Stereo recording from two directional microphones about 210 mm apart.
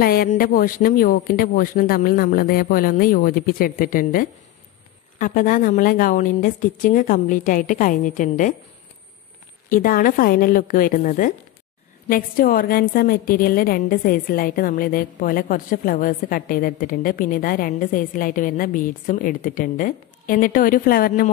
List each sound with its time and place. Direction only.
0.0 s a woman's voice: 45° left (ahead or behind)
9.7 s a woman's voice: 40° left (ahead or behind)